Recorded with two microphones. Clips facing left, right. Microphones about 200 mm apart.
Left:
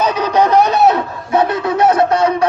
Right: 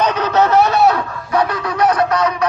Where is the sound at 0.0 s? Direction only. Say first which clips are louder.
Left 1 dB; 10° left (ahead or behind).